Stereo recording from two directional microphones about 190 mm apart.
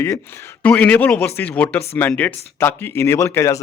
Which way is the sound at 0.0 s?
15° left (ahead or behind).